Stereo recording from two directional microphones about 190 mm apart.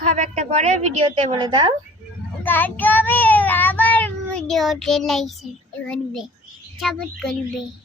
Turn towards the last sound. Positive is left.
turn(degrees=0)  # may be behind; listen again after turning